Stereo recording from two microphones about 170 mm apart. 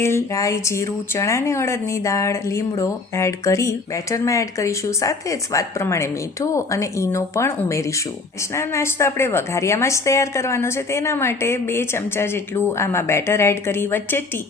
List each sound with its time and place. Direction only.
0.0 s speech: 15° left (ahead or behind)